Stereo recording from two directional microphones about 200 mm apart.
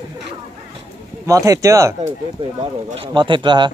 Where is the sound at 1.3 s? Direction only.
15° right (ahead or behind).